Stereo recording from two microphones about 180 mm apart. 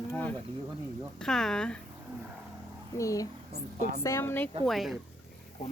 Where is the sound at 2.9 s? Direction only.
20° left (ahead or behind).